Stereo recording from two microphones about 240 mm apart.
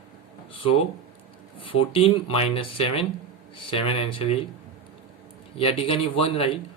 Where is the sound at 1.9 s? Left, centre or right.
Left.